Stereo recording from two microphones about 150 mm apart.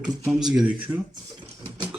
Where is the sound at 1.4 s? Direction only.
30° right (ahead or behind).